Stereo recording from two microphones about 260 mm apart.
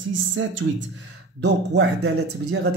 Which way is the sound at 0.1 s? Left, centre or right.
Right.